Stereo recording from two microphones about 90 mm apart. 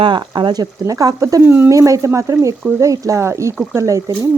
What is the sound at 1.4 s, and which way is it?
Speech, 25° right (ahead or behind).